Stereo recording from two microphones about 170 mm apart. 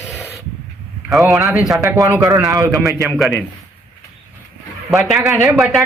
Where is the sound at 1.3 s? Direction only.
20° right (ahead or behind).